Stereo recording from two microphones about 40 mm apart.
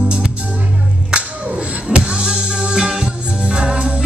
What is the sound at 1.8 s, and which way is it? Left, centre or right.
Music, right.